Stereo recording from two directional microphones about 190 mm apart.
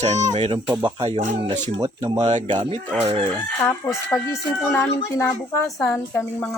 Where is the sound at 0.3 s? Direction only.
35° right (ahead or behind).